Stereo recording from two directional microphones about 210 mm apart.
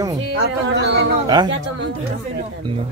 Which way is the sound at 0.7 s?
55° right (ahead or behind).